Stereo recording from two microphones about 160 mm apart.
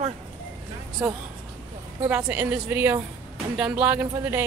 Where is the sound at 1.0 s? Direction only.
5° right (ahead or behind).